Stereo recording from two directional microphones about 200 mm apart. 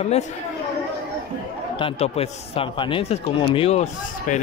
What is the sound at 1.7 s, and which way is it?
A man's voice, 30° left (ahead or behind).